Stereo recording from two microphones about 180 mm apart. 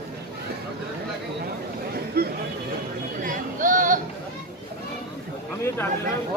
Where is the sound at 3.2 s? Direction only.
45° right (ahead or behind).